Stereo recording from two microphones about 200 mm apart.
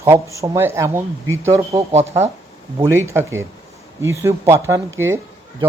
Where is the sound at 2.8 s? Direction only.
15° right (ahead or behind).